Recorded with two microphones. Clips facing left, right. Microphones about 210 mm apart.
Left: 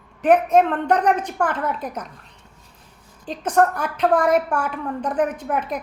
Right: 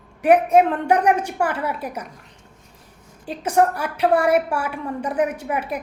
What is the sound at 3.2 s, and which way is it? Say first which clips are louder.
A woman's voice: even; 10° right (ahead or behind).